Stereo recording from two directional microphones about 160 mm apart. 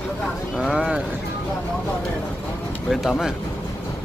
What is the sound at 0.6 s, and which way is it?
Speech, 5° right (ahead or behind).